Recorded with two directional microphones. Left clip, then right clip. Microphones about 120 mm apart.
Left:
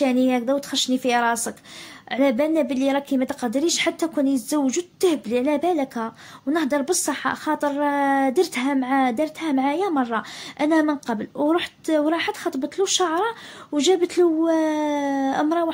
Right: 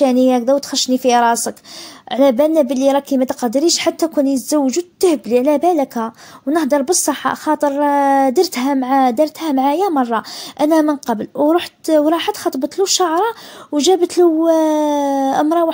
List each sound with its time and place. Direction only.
0.0 s speech: 60° right (ahead or behind)